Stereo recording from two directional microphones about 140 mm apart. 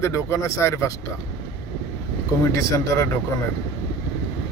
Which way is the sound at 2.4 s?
20° left (ahead or behind).